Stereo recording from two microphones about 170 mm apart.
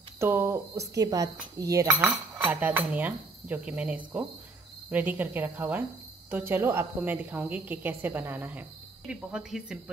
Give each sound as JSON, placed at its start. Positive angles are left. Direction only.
{"t": 0.2, "sound": "a woman's voice", "side_deg": -15}
{"t": 1.6, "sound": "cutlery", "side_deg": -20}
{"t": 2.0, "sound": "a woman's voice", "side_deg": -5}